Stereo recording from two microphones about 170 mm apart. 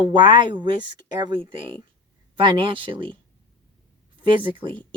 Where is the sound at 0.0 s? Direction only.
30° right (ahead or behind).